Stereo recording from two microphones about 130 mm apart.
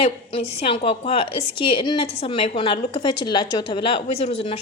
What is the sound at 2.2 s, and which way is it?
Speech, 50° left (ahead or behind).